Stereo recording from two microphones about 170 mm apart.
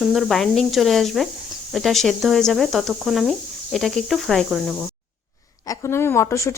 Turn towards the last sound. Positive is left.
turn(degrees=15)  # may be behind; listen again after turning